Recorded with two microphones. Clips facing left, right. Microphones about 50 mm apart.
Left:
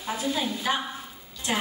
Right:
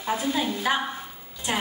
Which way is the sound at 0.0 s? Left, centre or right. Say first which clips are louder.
Right 3 dB; right.